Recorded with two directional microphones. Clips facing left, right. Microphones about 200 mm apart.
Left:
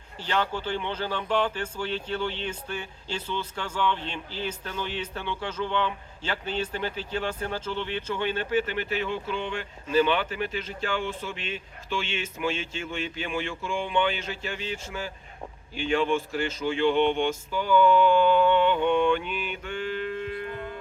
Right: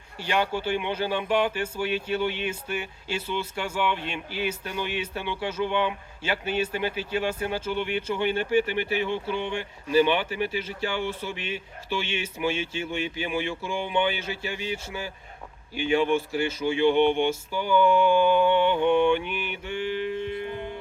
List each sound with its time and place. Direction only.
0.2 s speech: 10° right (ahead or behind)
19.6 s music: 10° right (ahead or behind)